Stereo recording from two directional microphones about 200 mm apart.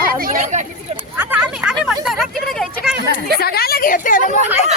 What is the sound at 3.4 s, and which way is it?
Speech, 50° left (ahead or behind).